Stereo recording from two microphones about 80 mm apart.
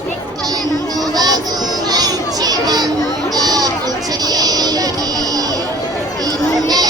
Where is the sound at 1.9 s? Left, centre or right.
Right.